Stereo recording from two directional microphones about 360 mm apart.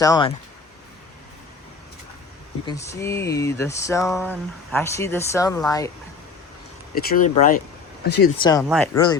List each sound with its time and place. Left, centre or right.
0.0 s speech: centre
2.6 s speech: centre
6.9 s speech: left
8.4 s speech: centre